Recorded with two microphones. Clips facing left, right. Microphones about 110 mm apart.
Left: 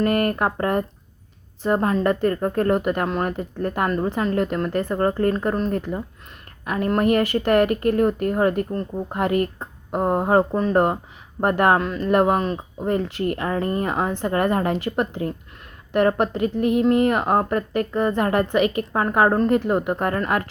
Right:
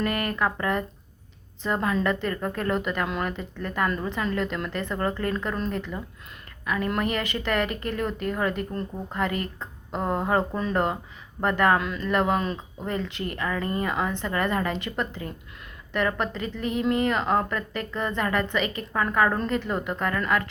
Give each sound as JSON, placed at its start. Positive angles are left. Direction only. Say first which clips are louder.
{"t": 0.0, "sound": "a woman's voice", "louder": "left 6 dB", "side_deg": 55}
{"t": 11.8, "sound": "a woman's voice", "louder": "left 6 dB", "side_deg": 40}